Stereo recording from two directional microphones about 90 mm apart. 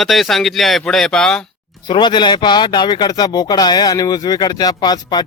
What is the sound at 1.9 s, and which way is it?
Speech, 60° left (ahead or behind).